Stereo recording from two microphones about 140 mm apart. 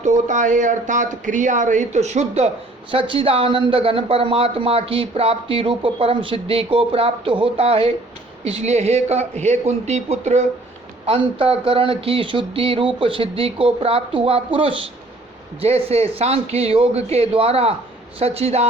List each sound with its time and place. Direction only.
0.0 s speech: 60° right (ahead or behind)
2.9 s speech: 40° right (ahead or behind)
11.0 s speech: 40° right (ahead or behind)